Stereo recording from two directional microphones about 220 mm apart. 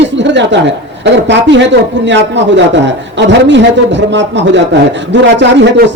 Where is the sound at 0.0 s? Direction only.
55° right (ahead or behind).